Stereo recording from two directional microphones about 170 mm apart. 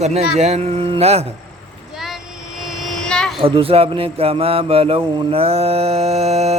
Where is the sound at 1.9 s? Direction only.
Centre (ahead or behind).